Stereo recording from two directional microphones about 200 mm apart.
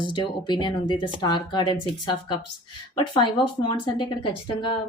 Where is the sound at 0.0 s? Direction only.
25° left (ahead or behind).